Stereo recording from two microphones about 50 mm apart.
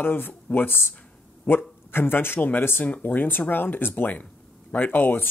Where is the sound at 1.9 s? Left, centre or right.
Left.